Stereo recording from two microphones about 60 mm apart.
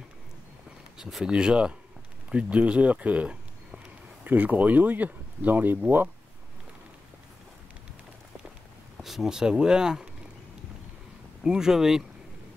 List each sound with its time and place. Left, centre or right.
1.0 s speech: centre
2.3 s a sound: centre
4.3 s speech: right
9.0 s speech: centre
11.4 s speech: centre